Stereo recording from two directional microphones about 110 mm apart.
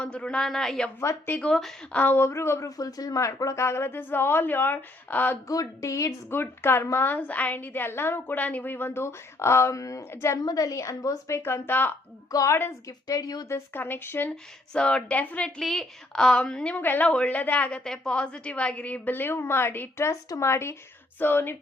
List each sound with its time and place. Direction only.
0.0 s a woman's voice: 10° left (ahead or behind)
0.9 s a woman's voice: 20° left (ahead or behind)
1.4 s a woman's voice: 5° left (ahead or behind)
1.9 s a woman's voice: 15° left (ahead or behind)
5.5 s a woman's voice: 30° left (ahead or behind)
12.3 s speech: 30° left (ahead or behind)
13.7 s a woman's voice: 15° left (ahead or behind)
14.7 s a woman's voice: 10° left (ahead or behind)
15.4 s a woman's voice: centre (ahead or behind); by 21.5 s 20° left (ahead or behind)